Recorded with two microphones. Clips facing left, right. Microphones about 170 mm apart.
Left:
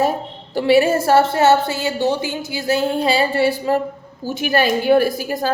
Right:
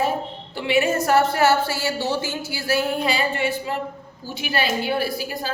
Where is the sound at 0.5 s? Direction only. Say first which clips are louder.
Left 7 dB; 35° left (ahead or behind).